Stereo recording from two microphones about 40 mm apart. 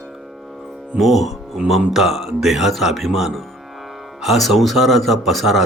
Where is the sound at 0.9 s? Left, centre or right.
Centre.